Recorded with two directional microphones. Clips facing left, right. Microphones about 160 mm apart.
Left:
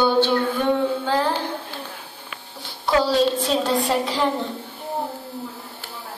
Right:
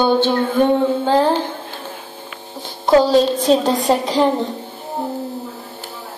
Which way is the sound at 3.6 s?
40° right (ahead or behind).